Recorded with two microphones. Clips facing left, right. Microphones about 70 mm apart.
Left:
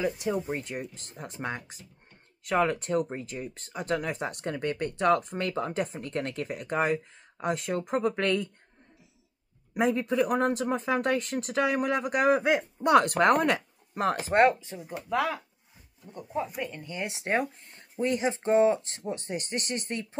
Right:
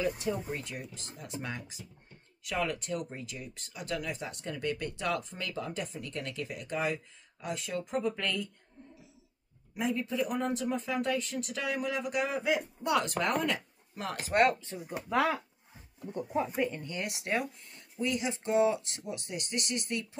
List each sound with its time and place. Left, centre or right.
0.0 s speech: left
0.5 s speech: left
9.8 s speech: left
14.0 s speech: left
14.7 s speech: centre
15.0 s speech: centre
16.1 s speech: centre
16.5 s speech: centre
16.8 s speech: left